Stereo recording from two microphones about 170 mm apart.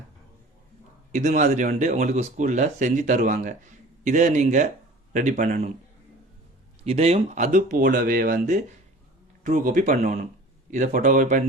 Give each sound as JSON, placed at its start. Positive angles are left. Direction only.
{"t": 1.1, "sound": "speech", "side_deg": -50}
{"t": 6.8, "sound": "speech", "side_deg": -40}